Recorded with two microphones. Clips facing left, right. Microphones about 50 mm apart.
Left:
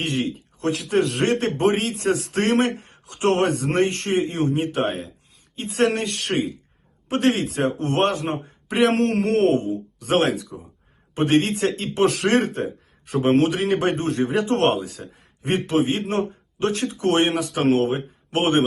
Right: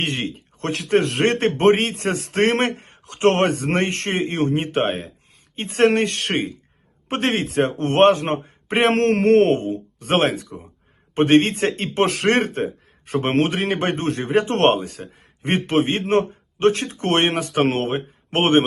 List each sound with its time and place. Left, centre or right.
0.0 s speech: right